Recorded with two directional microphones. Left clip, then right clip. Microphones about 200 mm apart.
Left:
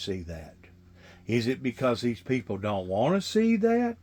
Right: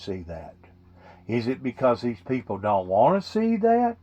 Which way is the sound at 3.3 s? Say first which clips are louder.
Even; 45° left (ahead or behind).